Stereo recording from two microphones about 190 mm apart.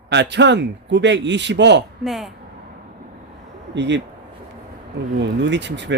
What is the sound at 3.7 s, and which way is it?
Speech, 70° right (ahead or behind).